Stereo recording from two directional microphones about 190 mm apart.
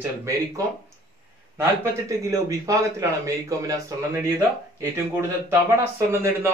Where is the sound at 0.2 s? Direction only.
15° right (ahead or behind).